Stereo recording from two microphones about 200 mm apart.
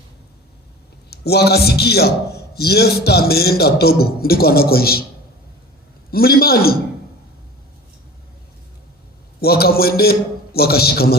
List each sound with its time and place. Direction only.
1.1 s a man's voice: 55° left (ahead or behind)
6.1 s a man's voice: 50° left (ahead or behind)
9.4 s a man's voice: 50° left (ahead or behind)